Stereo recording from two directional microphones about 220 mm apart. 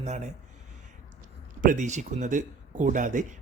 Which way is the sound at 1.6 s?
35° right (ahead or behind).